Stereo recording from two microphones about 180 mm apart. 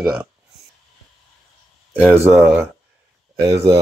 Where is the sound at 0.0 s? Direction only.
20° right (ahead or behind).